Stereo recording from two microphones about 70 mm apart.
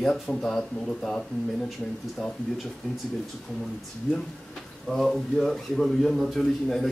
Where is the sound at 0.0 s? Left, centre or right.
Centre.